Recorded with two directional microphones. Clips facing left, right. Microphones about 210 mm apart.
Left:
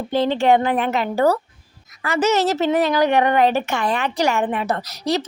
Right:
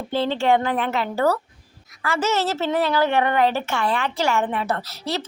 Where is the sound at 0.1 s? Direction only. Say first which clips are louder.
Left 3 dB; 15° left (ahead or behind).